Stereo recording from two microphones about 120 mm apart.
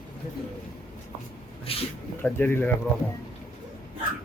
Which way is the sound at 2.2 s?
15° left (ahead or behind).